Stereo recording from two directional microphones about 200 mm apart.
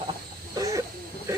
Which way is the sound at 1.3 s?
15° right (ahead or behind).